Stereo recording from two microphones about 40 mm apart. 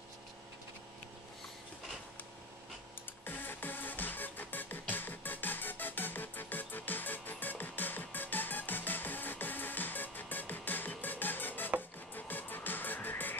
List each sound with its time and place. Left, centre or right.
3.3 s music: left